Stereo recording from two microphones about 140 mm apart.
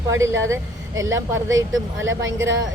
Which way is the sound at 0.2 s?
20° right (ahead or behind).